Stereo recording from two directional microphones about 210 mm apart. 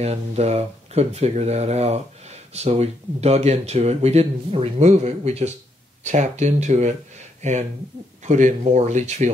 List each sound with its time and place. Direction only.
0.0 s speech: 30° right (ahead or behind)